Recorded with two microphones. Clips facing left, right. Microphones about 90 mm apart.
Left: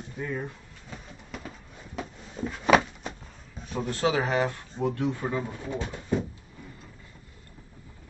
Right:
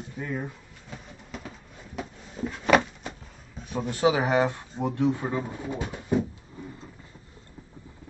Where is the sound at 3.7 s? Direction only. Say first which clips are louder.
Right 3 dB; 10° right (ahead or behind).